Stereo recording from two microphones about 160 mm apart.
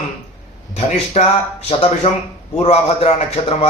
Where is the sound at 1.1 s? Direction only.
40° left (ahead or behind).